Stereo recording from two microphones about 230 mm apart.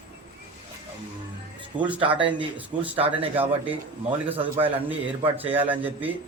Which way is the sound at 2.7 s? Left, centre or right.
Centre.